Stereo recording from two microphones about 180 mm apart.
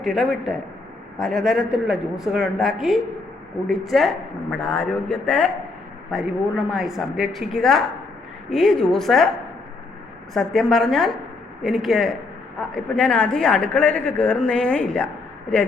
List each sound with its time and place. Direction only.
0.0 s a woman's voice: centre (ahead or behind)
10.3 s a woman's voice: centre (ahead or behind)